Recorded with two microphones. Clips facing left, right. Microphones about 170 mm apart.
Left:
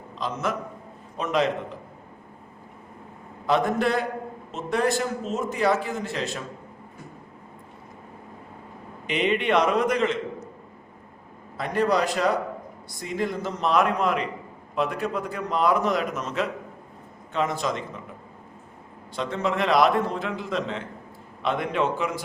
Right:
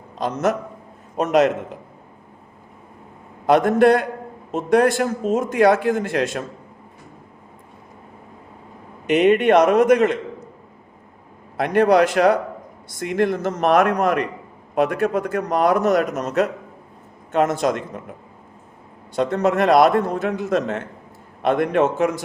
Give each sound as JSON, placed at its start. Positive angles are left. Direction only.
{"t": 0.2, "sound": "a man's voice", "side_deg": -45}
{"t": 3.4, "sound": "a man's voice", "side_deg": -75}
{"t": 5.0, "sound": "a man's voice", "side_deg": -50}
{"t": 5.4, "sound": "speech", "side_deg": -90}
{"t": 5.7, "sound": "speech", "side_deg": -55}
{"t": 9.0, "sound": "a man's voice", "side_deg": -50}
{"t": 11.5, "sound": "a man's voice", "side_deg": -75}
{"t": 13.6, "sound": "a man's voice", "side_deg": -50}
{"t": 17.3, "sound": "speech", "side_deg": -65}
{"t": 19.1, "sound": "a man's voice", "side_deg": -50}